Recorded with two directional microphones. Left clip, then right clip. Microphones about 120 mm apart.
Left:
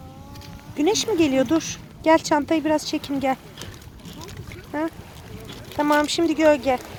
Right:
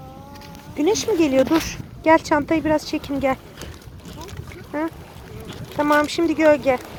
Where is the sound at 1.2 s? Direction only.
35° left (ahead or behind).